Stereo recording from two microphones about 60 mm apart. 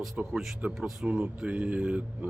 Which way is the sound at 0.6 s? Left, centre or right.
Right.